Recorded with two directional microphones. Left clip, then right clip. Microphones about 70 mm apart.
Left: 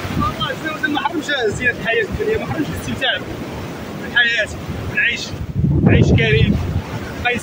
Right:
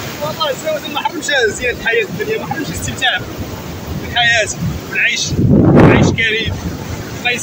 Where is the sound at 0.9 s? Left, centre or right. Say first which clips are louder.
Right 4 dB; centre.